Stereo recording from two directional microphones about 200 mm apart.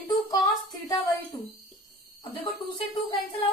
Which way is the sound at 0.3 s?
20° left (ahead or behind).